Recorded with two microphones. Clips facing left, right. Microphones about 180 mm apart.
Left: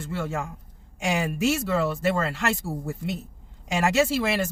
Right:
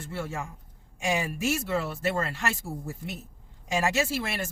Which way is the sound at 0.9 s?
90° left.